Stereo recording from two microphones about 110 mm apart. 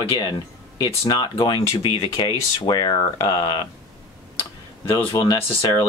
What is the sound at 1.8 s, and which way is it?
Speech, 40° left (ahead or behind).